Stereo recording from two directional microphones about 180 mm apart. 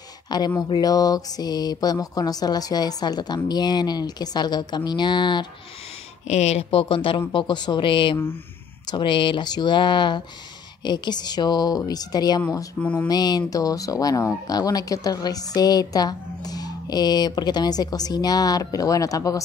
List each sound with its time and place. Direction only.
0.6 s speech: 20° left (ahead or behind)
6.2 s speech: 40° left (ahead or behind); by 12.6 s 20° left (ahead or behind)
12.8 s mantra: 10° left (ahead or behind)
13.1 s speech: 20° left (ahead or behind)